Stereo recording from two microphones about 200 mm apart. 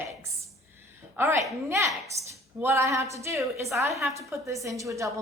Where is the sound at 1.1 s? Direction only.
15° right (ahead or behind).